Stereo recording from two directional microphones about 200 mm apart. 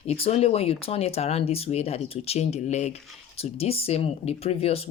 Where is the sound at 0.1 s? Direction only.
30° left (ahead or behind).